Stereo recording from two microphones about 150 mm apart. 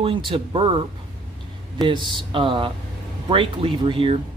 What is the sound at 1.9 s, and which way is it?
A man's voice, 35° right (ahead or behind).